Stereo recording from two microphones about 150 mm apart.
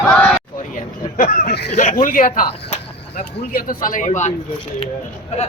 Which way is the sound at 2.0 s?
65° left (ahead or behind).